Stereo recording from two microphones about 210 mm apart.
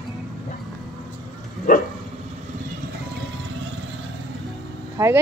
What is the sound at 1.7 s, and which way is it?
Dog, 40° left (ahead or behind).